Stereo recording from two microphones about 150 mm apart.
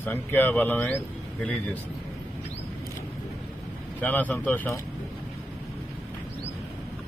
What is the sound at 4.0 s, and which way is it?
Speech, 10° left (ahead or behind).